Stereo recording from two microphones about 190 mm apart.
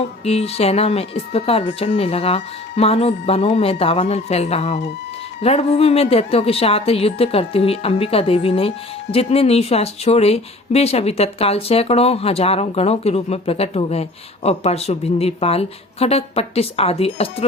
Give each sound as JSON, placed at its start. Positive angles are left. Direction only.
{"t": 0.3, "sound": "speech", "side_deg": 35}